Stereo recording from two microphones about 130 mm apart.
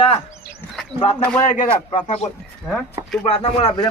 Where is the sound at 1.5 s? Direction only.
80° left.